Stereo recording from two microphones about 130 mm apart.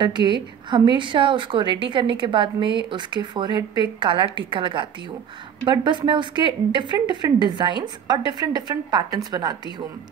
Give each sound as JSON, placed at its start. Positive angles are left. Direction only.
{"t": 0.0, "sound": "a woman's voice", "side_deg": -35}